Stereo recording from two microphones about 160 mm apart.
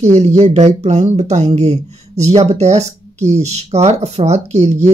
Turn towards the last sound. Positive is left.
turn(degrees=-45)  # may be behind; listen again after turning